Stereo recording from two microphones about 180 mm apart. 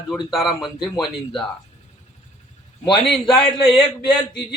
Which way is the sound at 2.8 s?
5° left (ahead or behind).